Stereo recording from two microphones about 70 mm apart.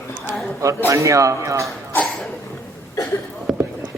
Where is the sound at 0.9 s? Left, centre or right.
Right.